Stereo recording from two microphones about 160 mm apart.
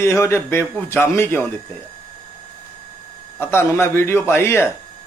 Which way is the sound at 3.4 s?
15° left (ahead or behind).